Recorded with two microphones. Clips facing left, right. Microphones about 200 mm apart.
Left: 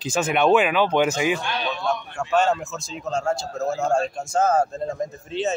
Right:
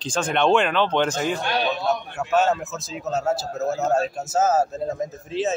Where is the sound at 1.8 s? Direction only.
5° right (ahead or behind).